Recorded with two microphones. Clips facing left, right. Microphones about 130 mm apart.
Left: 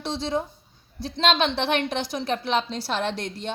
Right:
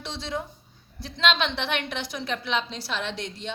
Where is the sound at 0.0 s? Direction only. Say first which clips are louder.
Left 6 dB; 30° left (ahead or behind).